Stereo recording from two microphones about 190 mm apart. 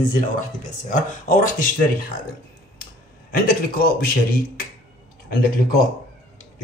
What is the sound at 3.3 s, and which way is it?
Speech, 50° left (ahead or behind).